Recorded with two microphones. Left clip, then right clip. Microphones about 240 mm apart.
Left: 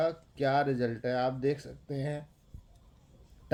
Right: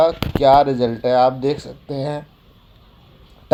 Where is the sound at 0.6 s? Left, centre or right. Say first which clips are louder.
Right 14 dB; centre.